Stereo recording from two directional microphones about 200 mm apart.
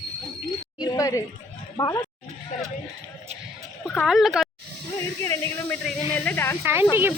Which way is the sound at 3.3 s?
35° right (ahead or behind).